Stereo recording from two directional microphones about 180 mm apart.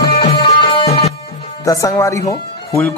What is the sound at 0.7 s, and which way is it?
Music, 35° left (ahead or behind).